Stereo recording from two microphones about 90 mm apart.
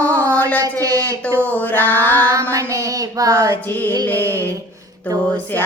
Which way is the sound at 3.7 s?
20° left (ahead or behind).